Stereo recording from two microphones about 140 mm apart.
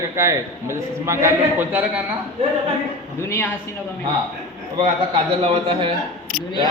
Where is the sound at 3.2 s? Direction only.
15° left (ahead or behind).